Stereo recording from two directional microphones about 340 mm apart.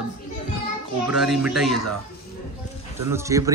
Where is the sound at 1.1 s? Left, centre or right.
Centre.